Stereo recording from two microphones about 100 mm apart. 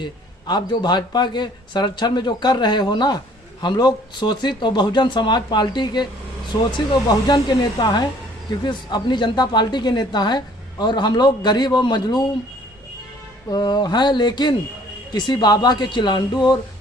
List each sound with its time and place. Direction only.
0.0 s a woman's voice: 50° left (ahead or behind)
13.5 s a woman's voice: 45° left (ahead or behind)